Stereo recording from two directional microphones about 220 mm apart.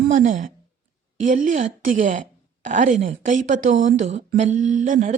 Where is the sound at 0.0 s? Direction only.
35° right (ahead or behind).